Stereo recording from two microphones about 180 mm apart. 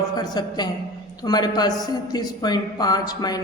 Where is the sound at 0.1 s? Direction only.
20° left (ahead or behind).